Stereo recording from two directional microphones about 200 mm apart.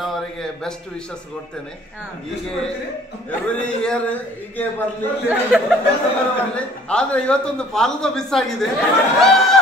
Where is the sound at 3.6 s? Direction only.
5° left (ahead or behind).